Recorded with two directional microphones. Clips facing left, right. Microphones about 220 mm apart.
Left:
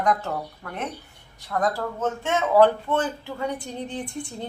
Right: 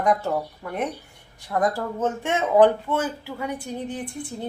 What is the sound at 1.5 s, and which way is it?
Speech, 25° right (ahead or behind).